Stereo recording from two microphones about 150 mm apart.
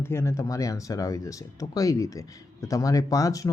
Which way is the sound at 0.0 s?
15° left (ahead or behind).